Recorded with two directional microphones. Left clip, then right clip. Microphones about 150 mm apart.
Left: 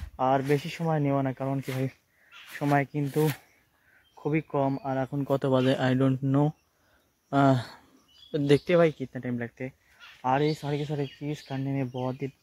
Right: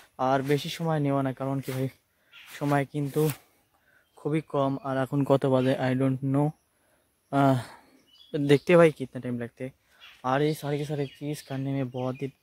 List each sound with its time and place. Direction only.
0.1 s a sound: 25° right (ahead or behind)
0.4 s speech: 20° right (ahead or behind)
5.5 s speech: 10° right (ahead or behind)
5.8 s speech: centre (ahead or behind)
8.6 s speech: 90° right
9.1 s speech: 25° right (ahead or behind)
10.2 s speech: 30° right (ahead or behind)